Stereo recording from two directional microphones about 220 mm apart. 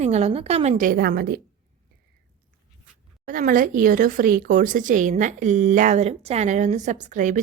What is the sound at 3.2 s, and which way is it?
Speech, 40° right (ahead or behind).